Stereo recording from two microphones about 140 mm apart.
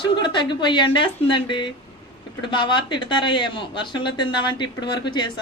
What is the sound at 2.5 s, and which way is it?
Speech, 35° left (ahead or behind).